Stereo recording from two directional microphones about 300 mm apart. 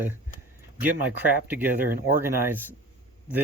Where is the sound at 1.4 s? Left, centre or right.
Centre.